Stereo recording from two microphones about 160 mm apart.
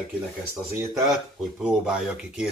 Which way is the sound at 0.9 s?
Centre (ahead or behind).